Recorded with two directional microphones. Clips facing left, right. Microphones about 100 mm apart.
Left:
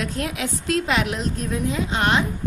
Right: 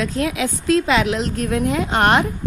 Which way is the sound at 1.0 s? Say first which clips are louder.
Right 5 dB; 85° right.